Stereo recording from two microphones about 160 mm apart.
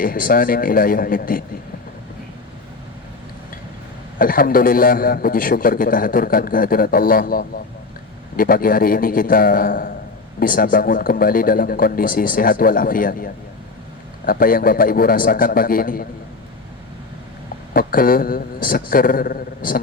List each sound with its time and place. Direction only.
0.0 s a man's voice: 65° left (ahead or behind)
4.2 s a man's voice: 65° left (ahead or behind)
17.7 s a man's voice: 65° left (ahead or behind)